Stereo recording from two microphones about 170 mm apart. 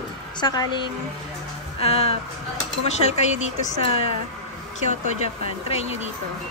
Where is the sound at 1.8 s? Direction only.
35° left (ahead or behind).